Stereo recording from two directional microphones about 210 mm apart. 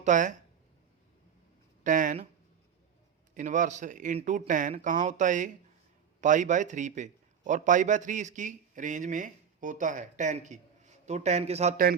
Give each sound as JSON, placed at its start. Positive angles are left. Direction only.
{"t": 0.0, "sound": "speech", "side_deg": -35}
{"t": 1.8, "sound": "speech", "side_deg": -40}
{"t": 3.3, "sound": "a man's voice", "side_deg": -35}